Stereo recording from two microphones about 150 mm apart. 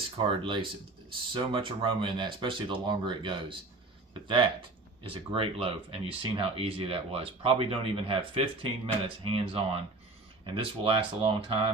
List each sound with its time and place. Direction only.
0.2 s speech: 35° right (ahead or behind)